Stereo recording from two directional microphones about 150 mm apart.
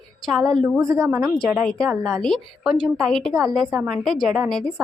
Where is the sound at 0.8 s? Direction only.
20° right (ahead or behind).